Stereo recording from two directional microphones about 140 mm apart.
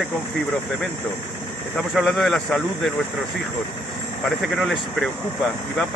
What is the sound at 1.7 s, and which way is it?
Speech, centre (ahead or behind).